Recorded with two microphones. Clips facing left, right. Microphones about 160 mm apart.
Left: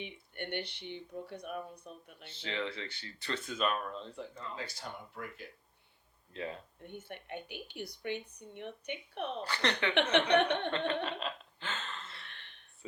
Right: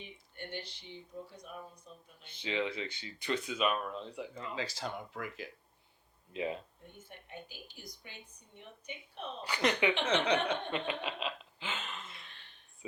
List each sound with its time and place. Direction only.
0.0 s speech: 65° left (ahead or behind)
2.3 s speech: 15° right (ahead or behind)
4.5 s speech: 90° right
6.3 s speech: 15° right (ahead or behind)
6.8 s speech: 65° left (ahead or behind)
9.4 s speech: 15° right (ahead or behind)
9.9 s speech: 65° left (ahead or behind)
10.3 s a sound: 65° left (ahead or behind)
10.7 s chuckle: 10° right (ahead or behind)